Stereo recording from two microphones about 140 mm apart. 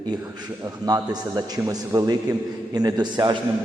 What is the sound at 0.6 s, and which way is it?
A man's voice, 30° right (ahead or behind).